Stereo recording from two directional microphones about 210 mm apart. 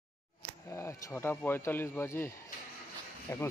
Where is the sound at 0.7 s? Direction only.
15° left (ahead or behind).